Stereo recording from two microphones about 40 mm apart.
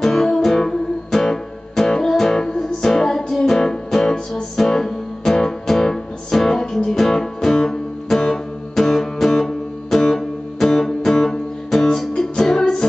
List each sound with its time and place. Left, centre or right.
0.0 s music: centre